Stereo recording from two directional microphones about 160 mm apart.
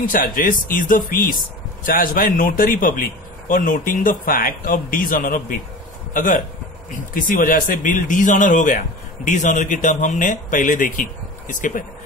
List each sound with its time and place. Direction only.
0.0 s speech: 60° left (ahead or behind)